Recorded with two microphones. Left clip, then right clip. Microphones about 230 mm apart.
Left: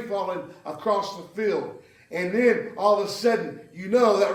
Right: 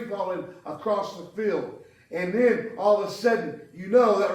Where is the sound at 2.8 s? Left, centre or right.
Left.